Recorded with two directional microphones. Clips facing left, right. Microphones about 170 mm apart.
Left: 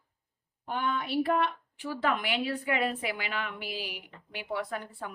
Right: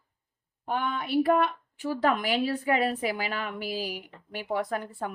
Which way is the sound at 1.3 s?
50° right (ahead or behind).